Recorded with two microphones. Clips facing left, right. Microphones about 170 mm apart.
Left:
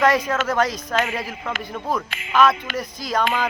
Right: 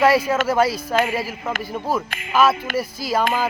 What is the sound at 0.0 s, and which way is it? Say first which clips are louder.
Speech: right 2 dB; 5° right (ahead or behind).